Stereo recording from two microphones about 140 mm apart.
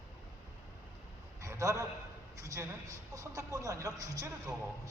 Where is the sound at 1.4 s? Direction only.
20° right (ahead or behind).